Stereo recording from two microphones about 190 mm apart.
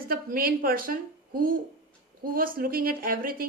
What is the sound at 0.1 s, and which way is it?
A woman's voice, 50° right (ahead or behind).